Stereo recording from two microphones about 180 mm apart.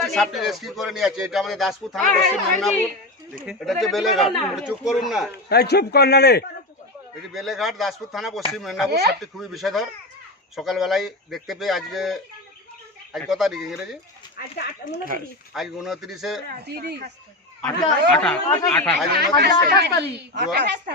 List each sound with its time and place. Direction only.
0.0 s speech: centre (ahead or behind)
5.5 s speech: 65° left (ahead or behind)
7.3 s speech: centre (ahead or behind)
8.9 s a woman's voice: 65° right (ahead or behind)
9.2 s speech: centre (ahead or behind)
14.3 s speech: 65° left (ahead or behind)
15.5 s speech: centre (ahead or behind)
16.5 s a woman's voice: 65° right (ahead or behind)
18.1 s speech: 5° left (ahead or behind)
19.1 s a woman's voice: 60° right (ahead or behind)